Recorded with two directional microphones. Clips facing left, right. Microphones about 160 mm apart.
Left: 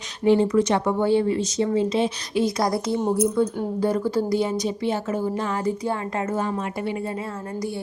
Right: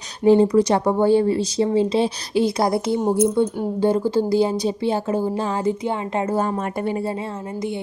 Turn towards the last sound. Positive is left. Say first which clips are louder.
# right 3 dB
turn(degrees=-45)  # may be behind; listen again after turning